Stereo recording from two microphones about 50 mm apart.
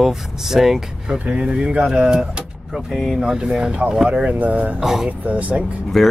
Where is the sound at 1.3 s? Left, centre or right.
Centre.